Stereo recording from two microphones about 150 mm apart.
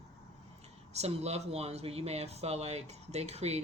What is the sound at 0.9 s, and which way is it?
Speech, 45° right (ahead or behind).